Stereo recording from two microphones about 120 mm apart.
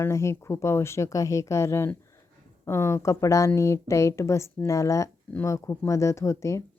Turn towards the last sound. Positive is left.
turn(degrees=25)  # may be behind; listen again after turning